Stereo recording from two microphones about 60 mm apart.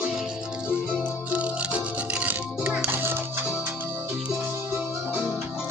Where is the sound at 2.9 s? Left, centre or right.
Right.